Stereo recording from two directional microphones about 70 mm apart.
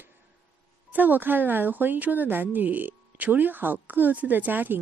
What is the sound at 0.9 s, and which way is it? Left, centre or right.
Speech, right.